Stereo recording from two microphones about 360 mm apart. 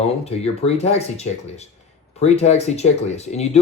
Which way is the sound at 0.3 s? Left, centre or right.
Centre.